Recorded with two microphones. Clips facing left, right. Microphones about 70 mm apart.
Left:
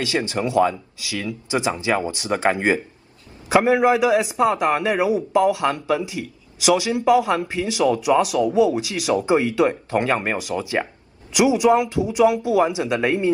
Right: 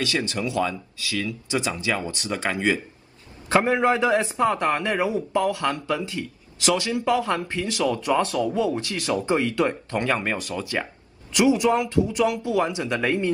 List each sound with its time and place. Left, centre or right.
0.0 s speech: left
3.4 s speech: centre